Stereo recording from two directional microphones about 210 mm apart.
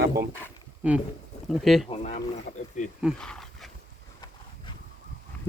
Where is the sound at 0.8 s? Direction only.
5° right (ahead or behind).